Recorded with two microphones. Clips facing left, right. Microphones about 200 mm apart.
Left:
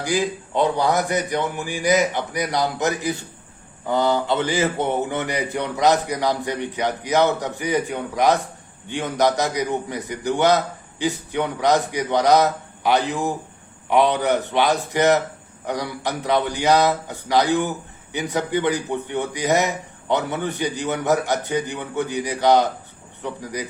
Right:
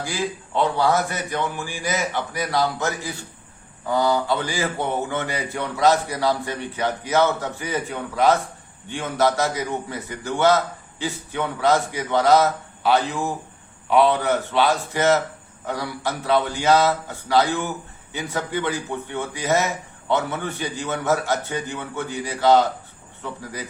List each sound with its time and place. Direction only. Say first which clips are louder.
0.0 s a man's voice: left 4 dB; 15° left (ahead or behind)